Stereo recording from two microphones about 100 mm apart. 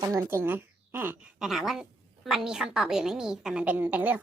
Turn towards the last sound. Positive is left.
turn(degrees=-15)  # may be behind; listen again after turning